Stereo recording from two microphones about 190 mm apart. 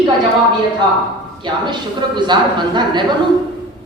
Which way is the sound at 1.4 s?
25° right (ahead or behind).